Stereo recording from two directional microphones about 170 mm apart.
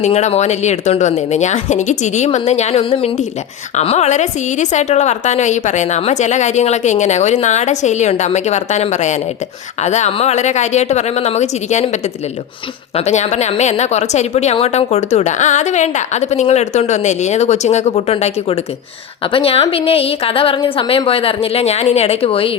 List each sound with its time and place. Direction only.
0.0 s a woman's voice: 40° left (ahead or behind)